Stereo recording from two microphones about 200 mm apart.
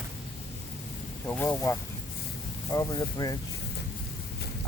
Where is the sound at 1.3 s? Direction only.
10° left (ahead or behind).